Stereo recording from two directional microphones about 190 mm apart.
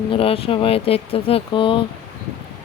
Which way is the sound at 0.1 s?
30° left (ahead or behind).